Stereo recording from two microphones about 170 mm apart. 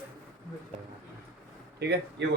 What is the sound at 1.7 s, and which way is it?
Speech, 80° right.